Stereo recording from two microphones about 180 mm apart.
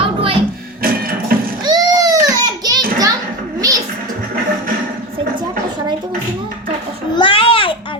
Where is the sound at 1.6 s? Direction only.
20° right (ahead or behind).